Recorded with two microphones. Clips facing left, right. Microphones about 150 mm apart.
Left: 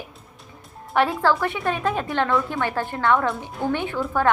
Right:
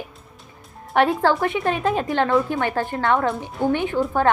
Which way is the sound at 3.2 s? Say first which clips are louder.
Right 3 dB; 15° right (ahead or behind).